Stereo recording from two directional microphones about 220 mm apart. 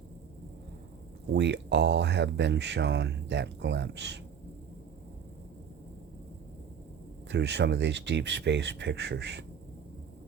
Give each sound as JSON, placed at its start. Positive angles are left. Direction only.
{"t": 1.3, "sound": "speech", "side_deg": -50}
{"t": 7.3, "sound": "speech", "side_deg": -55}